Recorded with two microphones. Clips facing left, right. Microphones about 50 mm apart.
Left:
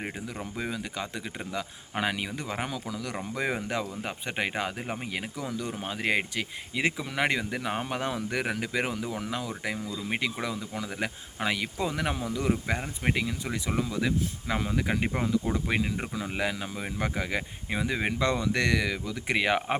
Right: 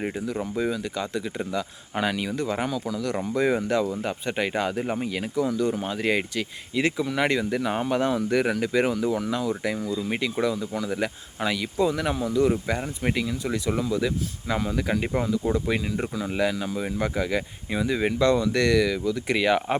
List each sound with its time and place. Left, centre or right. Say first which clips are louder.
0.5 s speech: right 5 dB; centre
5.0 s speech: right 8 dB; centre